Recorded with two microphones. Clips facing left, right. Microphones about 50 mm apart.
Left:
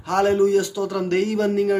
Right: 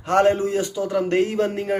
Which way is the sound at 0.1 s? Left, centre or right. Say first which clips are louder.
Left 1 dB; right.